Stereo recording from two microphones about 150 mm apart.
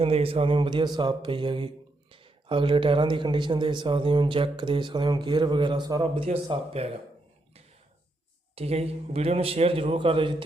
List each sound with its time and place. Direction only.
0.0 s speech: 40° right (ahead or behind)
8.5 s speech: 40° right (ahead or behind)